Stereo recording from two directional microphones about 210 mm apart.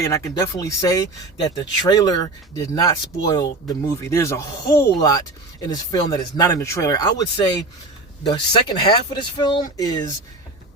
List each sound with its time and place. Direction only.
0.0 s speech: 15° left (ahead or behind)